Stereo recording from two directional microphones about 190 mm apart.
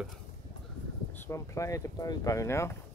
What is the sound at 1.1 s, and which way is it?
Speech, 10° left (ahead or behind).